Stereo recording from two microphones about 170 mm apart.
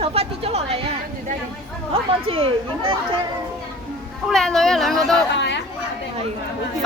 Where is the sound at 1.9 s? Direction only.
35° right (ahead or behind).